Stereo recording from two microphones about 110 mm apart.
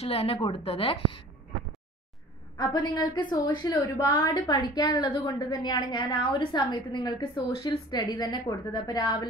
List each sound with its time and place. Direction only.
0.0 s a woman's voice: 65° left (ahead or behind)
2.5 s a woman's voice: 35° left (ahead or behind)